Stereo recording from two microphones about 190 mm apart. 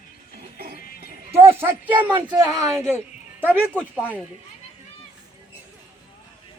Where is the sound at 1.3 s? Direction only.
15° right (ahead or behind).